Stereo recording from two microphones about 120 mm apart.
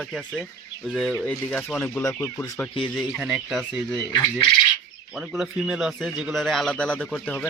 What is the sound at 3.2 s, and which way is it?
A man's voice, centre (ahead or behind).